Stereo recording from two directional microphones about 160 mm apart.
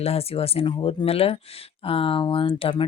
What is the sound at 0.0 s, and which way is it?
Speech, 40° left (ahead or behind).